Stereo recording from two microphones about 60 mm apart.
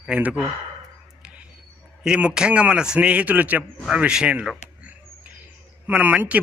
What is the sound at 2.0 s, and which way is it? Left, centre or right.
Speech, centre.